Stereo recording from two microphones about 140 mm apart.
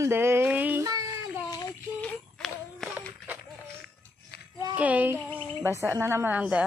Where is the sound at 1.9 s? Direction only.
5° left (ahead or behind).